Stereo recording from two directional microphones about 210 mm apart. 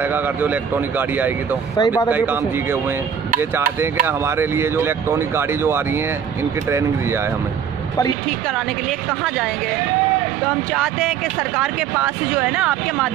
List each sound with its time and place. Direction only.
0.0 s speech: 10° right (ahead or behind)
1.8 s speech: 15° left (ahead or behind)
2.0 s speech: 10° right (ahead or behind)
10.7 s speech: centre (ahead or behind)